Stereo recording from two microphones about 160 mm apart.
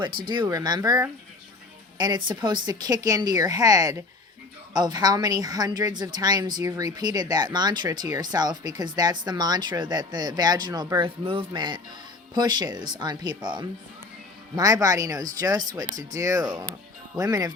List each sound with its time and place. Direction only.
0.3 s speech: 25° right (ahead or behind)